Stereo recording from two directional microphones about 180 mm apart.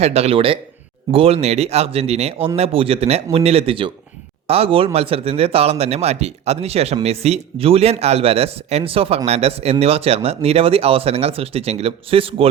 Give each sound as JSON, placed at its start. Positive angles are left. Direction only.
{"t": 0.0, "sound": "a man's voice", "side_deg": -35}